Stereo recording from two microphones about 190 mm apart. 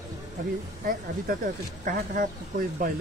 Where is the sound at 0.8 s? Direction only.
50° right (ahead or behind).